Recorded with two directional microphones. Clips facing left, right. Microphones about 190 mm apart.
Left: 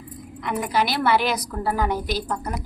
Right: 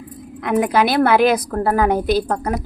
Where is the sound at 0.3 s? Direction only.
55° right (ahead or behind).